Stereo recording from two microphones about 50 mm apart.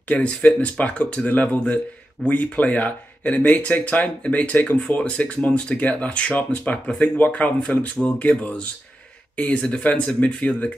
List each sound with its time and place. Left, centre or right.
0.1 s speech: left
9.7 s speech: left